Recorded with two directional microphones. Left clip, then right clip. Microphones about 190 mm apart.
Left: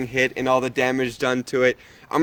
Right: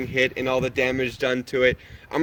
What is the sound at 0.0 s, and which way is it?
Speech, 45° left (ahead or behind).